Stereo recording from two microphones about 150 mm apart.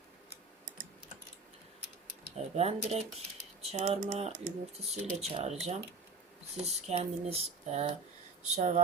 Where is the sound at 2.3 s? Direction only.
45° right (ahead or behind).